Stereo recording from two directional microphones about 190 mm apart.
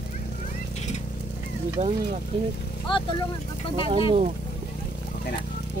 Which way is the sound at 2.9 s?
25° left (ahead or behind).